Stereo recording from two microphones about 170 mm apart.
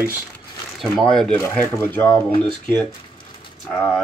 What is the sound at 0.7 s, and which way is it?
Speech, centre (ahead or behind).